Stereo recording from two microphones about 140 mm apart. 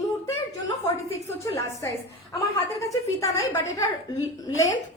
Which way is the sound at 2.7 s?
25° left (ahead or behind).